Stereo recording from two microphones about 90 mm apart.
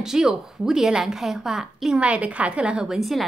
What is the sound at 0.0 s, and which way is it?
A woman's voice, 5° right (ahead or behind).